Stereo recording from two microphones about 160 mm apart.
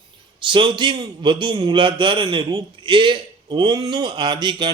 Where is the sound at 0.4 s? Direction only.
30° right (ahead or behind).